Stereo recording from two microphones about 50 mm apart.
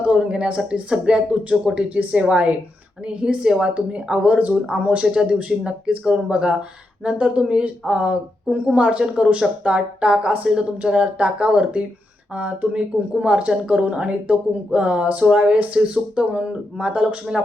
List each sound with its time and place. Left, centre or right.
0.0 s speech: right
5.1 s speech: centre